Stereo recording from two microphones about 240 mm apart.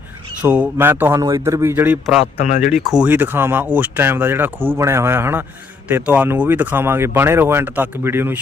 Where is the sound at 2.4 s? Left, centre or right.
Left.